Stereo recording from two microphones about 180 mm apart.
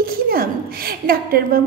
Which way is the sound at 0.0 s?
55° right (ahead or behind).